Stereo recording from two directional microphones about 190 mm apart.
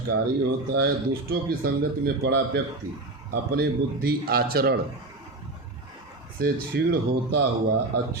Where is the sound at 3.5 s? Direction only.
55° right (ahead or behind).